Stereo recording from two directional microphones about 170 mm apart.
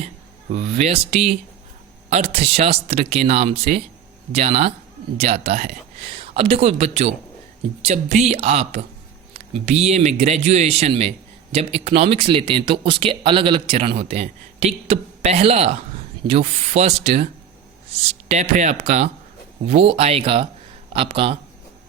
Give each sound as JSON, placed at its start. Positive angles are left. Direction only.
{"t": 0.5, "sound": "speech", "side_deg": -35}